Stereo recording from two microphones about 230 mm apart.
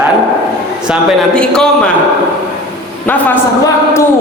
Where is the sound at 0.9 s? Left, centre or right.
Centre.